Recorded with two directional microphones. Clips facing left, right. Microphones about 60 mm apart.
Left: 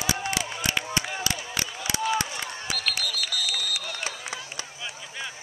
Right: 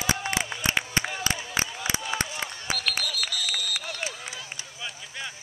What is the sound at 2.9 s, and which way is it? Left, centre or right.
Run, right.